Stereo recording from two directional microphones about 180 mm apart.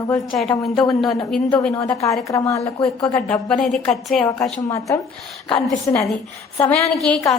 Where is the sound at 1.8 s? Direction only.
15° left (ahead or behind).